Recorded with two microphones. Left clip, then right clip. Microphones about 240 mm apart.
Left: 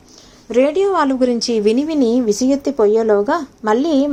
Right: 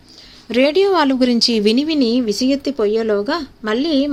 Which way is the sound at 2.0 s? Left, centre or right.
Centre.